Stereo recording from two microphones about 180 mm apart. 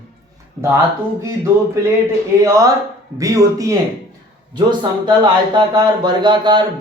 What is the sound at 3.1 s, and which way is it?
Speech, 15° right (ahead or behind).